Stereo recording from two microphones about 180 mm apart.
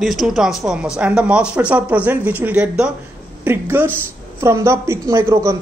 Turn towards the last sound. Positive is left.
turn(degrees=-15)  # may be behind; listen again after turning